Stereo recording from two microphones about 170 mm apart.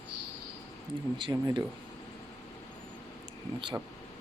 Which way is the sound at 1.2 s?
25° right (ahead or behind).